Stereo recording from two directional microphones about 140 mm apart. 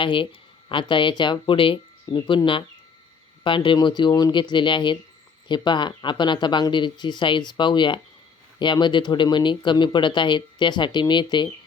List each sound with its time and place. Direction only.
0.0 s speech: 40° left (ahead or behind)